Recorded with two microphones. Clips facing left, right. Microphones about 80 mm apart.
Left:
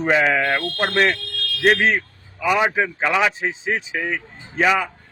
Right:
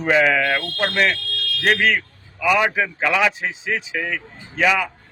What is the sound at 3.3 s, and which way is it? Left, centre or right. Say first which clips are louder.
Speech: left 1 dB; left.